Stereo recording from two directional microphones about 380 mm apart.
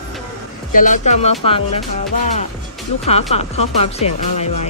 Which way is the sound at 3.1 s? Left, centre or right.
Centre.